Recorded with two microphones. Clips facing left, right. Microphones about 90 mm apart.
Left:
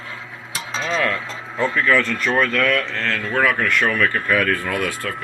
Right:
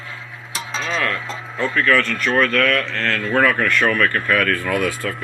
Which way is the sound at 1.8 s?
15° left (ahead or behind).